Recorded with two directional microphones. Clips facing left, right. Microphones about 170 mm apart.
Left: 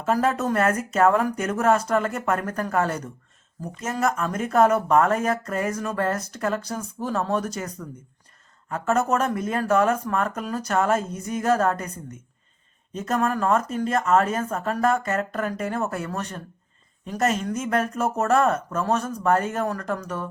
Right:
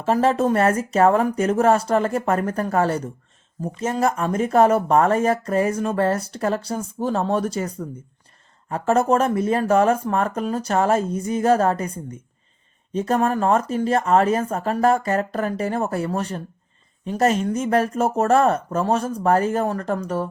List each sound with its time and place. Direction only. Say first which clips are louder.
0.0 s speech: right 4 dB; 25° right (ahead or behind)
12.9 s speech: right 4 dB; 30° right (ahead or behind)